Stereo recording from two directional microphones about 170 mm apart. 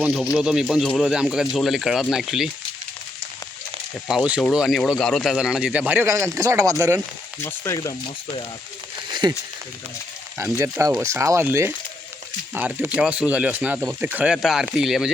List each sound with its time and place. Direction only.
0.0 s speech: 5° right (ahead or behind)
4.1 s speech: 5° right (ahead or behind)
7.4 s frying: 15° left (ahead or behind)
9.2 s speech: 25° right (ahead or behind); by 15.1 s centre (ahead or behind)